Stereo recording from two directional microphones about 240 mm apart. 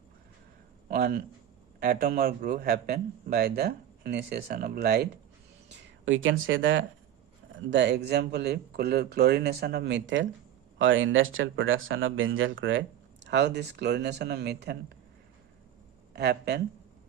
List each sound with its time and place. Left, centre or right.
0.9 s a man's voice: right
16.1 s speech: right